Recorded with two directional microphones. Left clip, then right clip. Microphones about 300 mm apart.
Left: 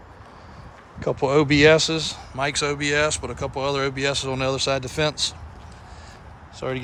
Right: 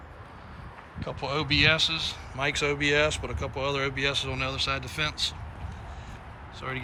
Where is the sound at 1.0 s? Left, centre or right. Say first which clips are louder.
Left 11 dB; left.